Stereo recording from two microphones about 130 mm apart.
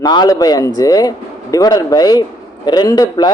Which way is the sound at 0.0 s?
35° left (ahead or behind).